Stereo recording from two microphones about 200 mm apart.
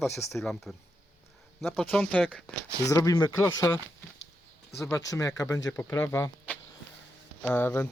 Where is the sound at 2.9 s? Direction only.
15° left (ahead or behind).